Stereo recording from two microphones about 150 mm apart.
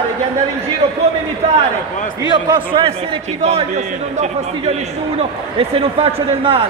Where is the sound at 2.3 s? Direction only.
30° right (ahead or behind).